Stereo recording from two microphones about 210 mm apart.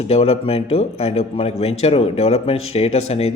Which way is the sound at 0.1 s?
30° left (ahead or behind).